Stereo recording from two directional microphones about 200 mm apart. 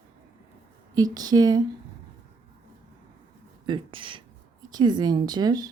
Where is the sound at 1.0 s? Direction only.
20° right (ahead or behind).